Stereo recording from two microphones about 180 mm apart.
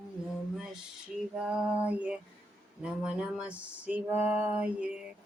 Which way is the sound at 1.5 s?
5° right (ahead or behind).